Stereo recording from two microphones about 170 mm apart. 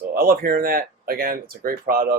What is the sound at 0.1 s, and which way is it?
Speech, 55° right (ahead or behind).